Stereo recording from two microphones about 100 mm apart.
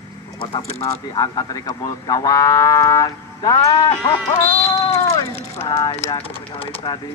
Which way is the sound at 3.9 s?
65° left (ahead or behind).